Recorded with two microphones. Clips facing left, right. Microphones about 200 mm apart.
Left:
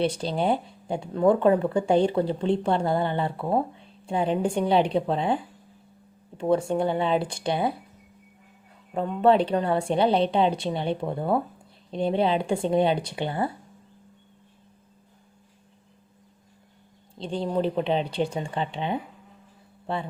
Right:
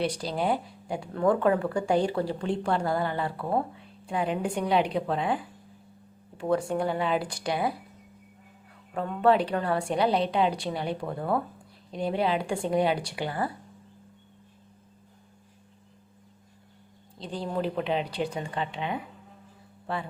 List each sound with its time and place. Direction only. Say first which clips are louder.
0.0 s speech: left 3 dB; 25° left (ahead or behind)
8.9 s speech: left 3 dB; 25° left (ahead or behind)
17.2 s speech: left 5 dB; 25° left (ahead or behind)